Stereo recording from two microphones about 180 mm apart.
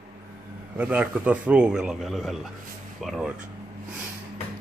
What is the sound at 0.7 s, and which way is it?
A man's voice, 10° right (ahead or behind).